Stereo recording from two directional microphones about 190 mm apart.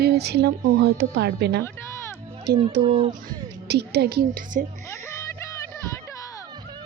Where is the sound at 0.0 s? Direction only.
60° right (ahead or behind).